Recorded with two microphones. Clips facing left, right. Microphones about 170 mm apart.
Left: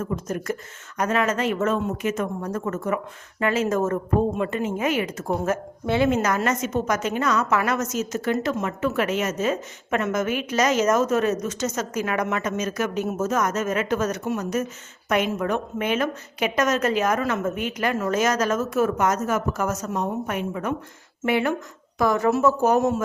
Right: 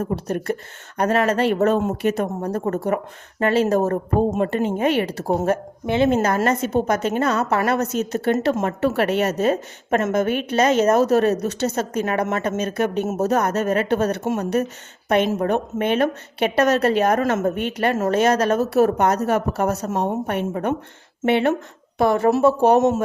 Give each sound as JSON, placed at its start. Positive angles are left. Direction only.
{"t": 0.0, "sound": "a woman's voice", "side_deg": -40}
{"t": 5.8, "sound": "a woman's voice", "side_deg": -20}
{"t": 6.1, "sound": "a woman's voice", "side_deg": -30}